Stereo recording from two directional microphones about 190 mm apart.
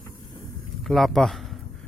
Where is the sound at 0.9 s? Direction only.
Centre (ahead or behind).